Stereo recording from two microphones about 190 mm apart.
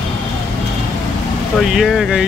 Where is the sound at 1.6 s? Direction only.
Centre (ahead or behind).